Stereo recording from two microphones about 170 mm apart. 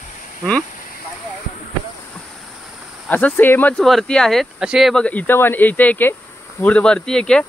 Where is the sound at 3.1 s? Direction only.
10° left (ahead or behind).